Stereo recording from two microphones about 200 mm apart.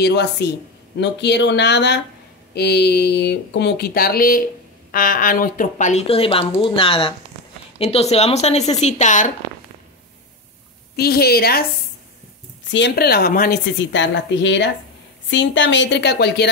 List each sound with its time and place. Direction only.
0.0 s speech: 55° left (ahead or behind); by 9.3 s 35° left (ahead or behind)
11.0 s speech: 50° left (ahead or behind)
12.7 s speech: 55° left (ahead or behind)
13.7 s speech: 65° left (ahead or behind)